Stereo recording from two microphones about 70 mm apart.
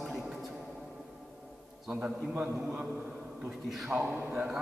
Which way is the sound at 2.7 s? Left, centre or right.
Centre.